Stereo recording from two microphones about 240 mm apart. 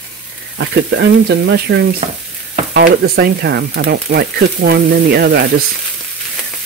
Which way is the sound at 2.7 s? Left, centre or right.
Right.